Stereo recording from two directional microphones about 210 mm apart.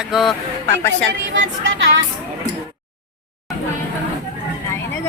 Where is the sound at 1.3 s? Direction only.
60° right (ahead or behind).